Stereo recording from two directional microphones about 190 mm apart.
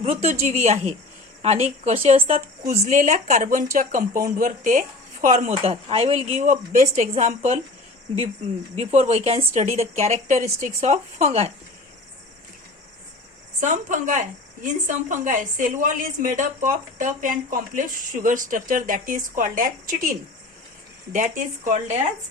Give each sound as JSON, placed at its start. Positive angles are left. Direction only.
{"t": 0.0, "sound": "a woman's voice", "side_deg": -35}
{"t": 8.7, "sound": "a woman's voice", "side_deg": -35}
{"t": 13.6, "sound": "a woman's voice", "side_deg": -40}